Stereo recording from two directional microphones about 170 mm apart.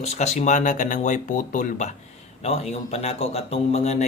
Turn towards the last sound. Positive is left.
turn(degrees=40)  # may be behind; listen again after turning